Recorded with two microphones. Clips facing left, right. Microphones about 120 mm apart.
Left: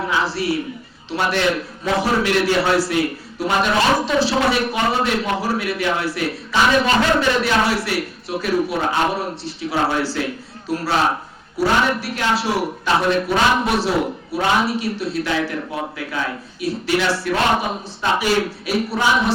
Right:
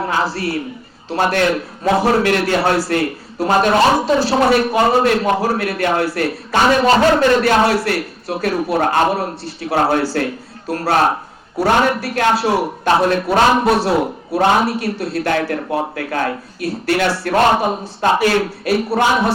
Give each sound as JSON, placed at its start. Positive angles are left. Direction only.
{"t": 0.1, "sound": "a man's voice", "side_deg": -50}